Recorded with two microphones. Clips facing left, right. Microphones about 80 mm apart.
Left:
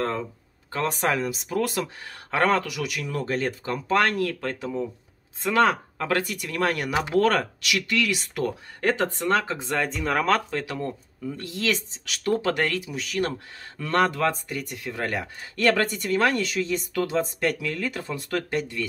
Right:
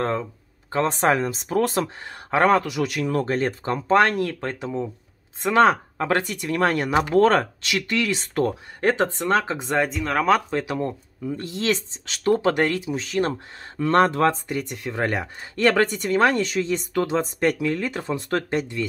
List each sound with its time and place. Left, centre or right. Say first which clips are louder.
0.7 s speech: right 5 dB; right
2.3 s speech: right 4 dB; right
2.8 s speech: right 6 dB; right
9.8 s speech: right 1 dB; centre
10.5 s speech: right 4 dB; right